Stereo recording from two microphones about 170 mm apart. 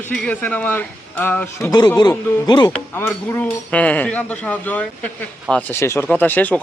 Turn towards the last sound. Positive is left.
turn(degrees=10)  # may be behind; listen again after turning